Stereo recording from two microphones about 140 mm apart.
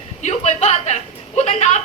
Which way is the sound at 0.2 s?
50° left (ahead or behind).